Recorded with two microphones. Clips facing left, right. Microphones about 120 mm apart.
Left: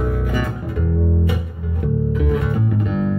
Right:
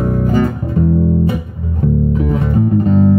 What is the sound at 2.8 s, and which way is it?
Music, 40° right (ahead or behind).